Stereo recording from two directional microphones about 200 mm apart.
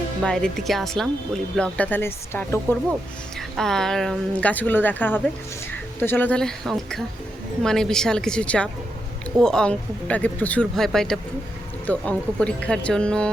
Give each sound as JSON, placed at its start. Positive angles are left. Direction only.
{"t": 0.2, "sound": "speech", "side_deg": 5}